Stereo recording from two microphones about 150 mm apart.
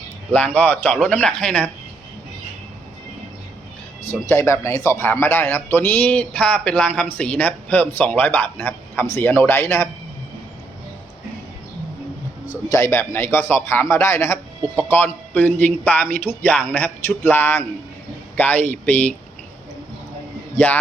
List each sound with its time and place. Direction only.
0.3 s a man's voice: 10° left (ahead or behind)
4.3 s a man's voice: 20° left (ahead or behind)
12.6 s a man's voice: 20° left (ahead or behind)